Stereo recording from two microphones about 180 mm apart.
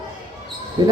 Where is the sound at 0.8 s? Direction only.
20° right (ahead or behind).